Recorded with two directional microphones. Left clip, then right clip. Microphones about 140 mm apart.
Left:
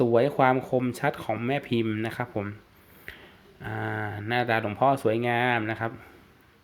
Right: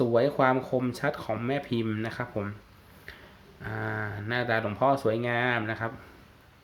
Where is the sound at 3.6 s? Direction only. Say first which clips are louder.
Left 1 dB; 25° left (ahead or behind).